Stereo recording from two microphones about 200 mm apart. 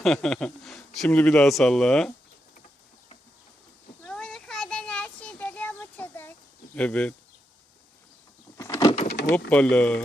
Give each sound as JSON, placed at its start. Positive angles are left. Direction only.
{"t": 0.0, "sound": "a man's voice", "side_deg": 0}
{"t": 4.0, "sound": "a sound", "side_deg": 5}
{"t": 6.7, "sound": "a man's voice", "side_deg": 5}
{"t": 8.5, "sound": "power windows", "side_deg": 15}
{"t": 9.0, "sound": "vehicle", "side_deg": 60}
{"t": 9.5, "sound": "a man's voice", "side_deg": 5}